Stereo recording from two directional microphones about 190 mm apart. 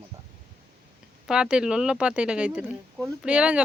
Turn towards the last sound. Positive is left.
turn(degrees=-5)  # may be behind; listen again after turning